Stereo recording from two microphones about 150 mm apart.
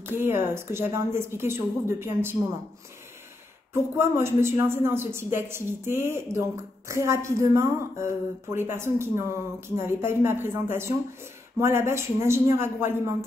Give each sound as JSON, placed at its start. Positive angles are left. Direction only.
{"t": 0.0, "sound": "a woman's voice", "side_deg": -15}
{"t": 3.7, "sound": "a woman's voice", "side_deg": -15}